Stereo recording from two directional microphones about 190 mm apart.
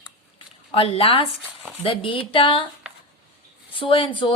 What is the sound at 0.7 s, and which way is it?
Speech, 30° left (ahead or behind).